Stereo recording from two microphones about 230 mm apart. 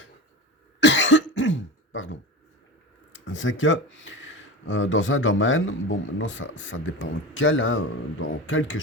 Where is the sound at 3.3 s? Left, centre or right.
Left.